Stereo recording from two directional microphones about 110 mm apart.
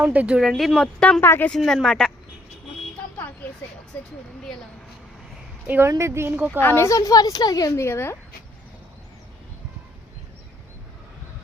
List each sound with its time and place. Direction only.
0.0 s speech: 15° right (ahead or behind); by 1.2 s 5° left (ahead or behind)
1.2 s speech: 20° left (ahead or behind)
1.5 s speech: 5° left (ahead or behind)
3.4 s speech: 15° left (ahead or behind)
5.6 s a woman's voice: 20° right (ahead or behind)
6.3 s a woman's voice: 15° right (ahead or behind)
6.6 s a woman's voice: 20° left (ahead or behind)
7.9 s speech: 20° left (ahead or behind)